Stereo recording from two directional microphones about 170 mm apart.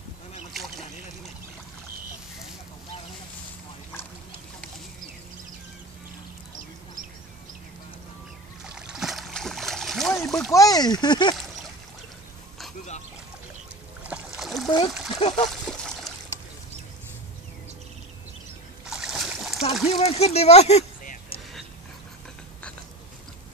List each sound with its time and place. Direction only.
8.6 s a sound: 5° right (ahead or behind)
10.5 s speech: 20° left (ahead or behind)
14.0 s boat: 5° right (ahead or behind)
15.0 s speech: 30° left (ahead or behind)
15.4 s splash: centre (ahead or behind)
18.9 s boat: 5° right (ahead or behind)
19.9 s a sound: 35° left (ahead or behind)